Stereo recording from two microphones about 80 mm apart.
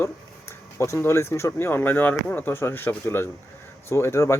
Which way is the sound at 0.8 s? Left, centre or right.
Left.